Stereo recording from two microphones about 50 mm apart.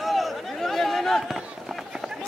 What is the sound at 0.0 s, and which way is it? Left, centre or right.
Run, centre.